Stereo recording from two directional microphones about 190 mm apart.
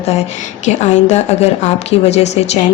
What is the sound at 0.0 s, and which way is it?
Speech, 35° left (ahead or behind).